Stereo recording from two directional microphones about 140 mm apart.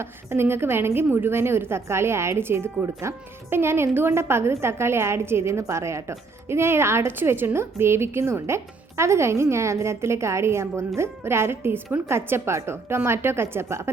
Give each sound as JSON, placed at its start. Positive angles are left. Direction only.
{"t": 0.0, "sound": "a woman's voice", "side_deg": -15}